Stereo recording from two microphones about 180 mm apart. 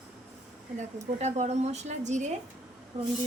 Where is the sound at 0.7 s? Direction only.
40° right (ahead or behind).